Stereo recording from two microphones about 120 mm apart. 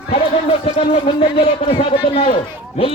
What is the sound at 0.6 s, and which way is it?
A man's voice, 50° left (ahead or behind).